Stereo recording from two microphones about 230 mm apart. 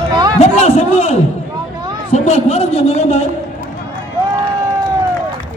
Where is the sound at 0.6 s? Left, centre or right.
Left.